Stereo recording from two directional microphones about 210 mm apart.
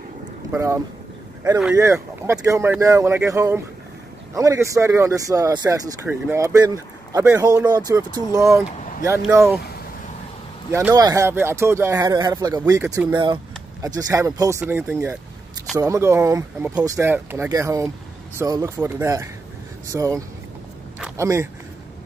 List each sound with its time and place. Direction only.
0.5 s speech: 15° right (ahead or behind)
10.7 s speech: 10° right (ahead or behind)